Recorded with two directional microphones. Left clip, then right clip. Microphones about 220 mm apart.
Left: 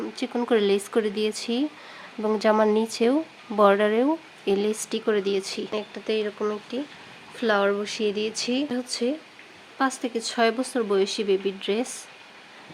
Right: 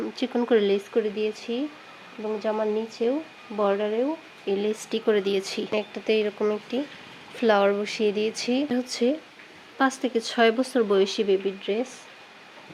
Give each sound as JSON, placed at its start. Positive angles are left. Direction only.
{"t": 0.0, "sound": "speech", "side_deg": 0}
{"t": 0.9, "sound": "speech", "side_deg": 20}
{"t": 4.5, "sound": "speech", "side_deg": 10}
{"t": 11.4, "sound": "speech", "side_deg": 15}